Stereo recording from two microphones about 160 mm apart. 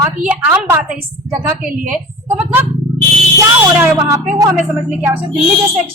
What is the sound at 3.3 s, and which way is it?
Speech, 20° right (ahead or behind).